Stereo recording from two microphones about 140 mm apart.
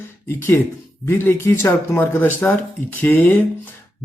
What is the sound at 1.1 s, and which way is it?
Speech, 20° left (ahead or behind).